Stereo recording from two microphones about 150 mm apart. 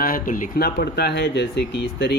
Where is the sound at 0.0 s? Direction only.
65° left (ahead or behind).